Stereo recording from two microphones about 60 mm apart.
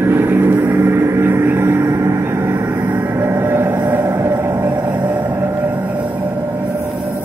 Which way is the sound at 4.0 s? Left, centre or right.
Right.